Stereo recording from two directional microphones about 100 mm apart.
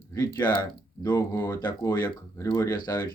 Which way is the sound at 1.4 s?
35° left (ahead or behind).